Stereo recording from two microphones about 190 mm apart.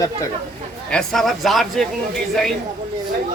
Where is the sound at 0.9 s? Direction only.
5° left (ahead or behind).